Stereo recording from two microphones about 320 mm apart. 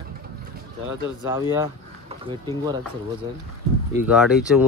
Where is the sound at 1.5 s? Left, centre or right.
Centre.